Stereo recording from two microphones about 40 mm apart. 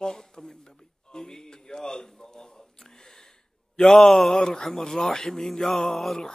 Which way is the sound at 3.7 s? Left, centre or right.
Centre.